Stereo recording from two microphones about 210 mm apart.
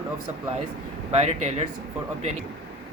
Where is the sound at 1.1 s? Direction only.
30° right (ahead or behind).